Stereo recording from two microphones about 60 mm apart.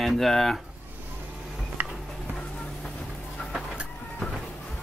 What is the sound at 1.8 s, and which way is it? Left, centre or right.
Music, right.